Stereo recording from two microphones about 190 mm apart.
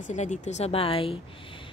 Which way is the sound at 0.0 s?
40° left (ahead or behind).